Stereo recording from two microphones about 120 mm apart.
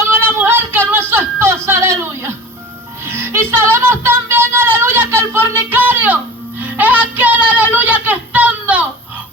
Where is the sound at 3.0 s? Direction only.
20° right (ahead or behind).